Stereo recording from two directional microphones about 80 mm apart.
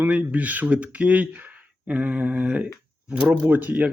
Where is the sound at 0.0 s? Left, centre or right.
Centre.